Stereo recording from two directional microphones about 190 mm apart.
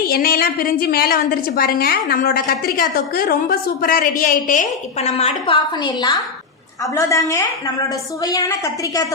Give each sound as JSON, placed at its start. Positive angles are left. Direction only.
{"t": 0.0, "sound": "a woman's voice", "side_deg": 50}